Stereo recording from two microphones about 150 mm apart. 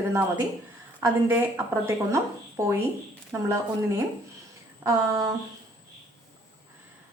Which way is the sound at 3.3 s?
20° right (ahead or behind).